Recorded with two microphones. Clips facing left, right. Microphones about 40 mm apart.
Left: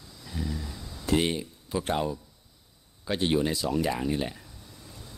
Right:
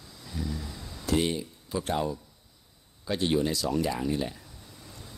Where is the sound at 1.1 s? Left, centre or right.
Left.